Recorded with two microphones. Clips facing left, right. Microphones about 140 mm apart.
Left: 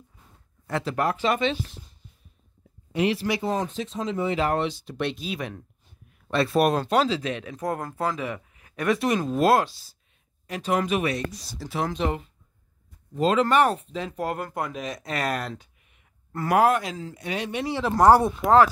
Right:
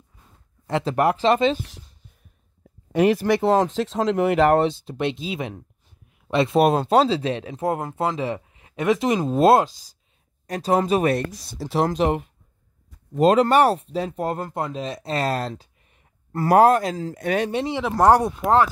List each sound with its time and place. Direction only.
0.7 s speech: 25° right (ahead or behind)
1.2 s speech: 35° right (ahead or behind)
2.9 s speech: 50° right (ahead or behind)
3.4 s speech: 90° right; by 4.6 s 65° right (ahead or behind)
4.6 s speech: 30° right (ahead or behind)
10.4 s speech: 35° right (ahead or behind)
17.2 s speech: 50° right (ahead or behind)
17.6 s speech: 15° right (ahead or behind)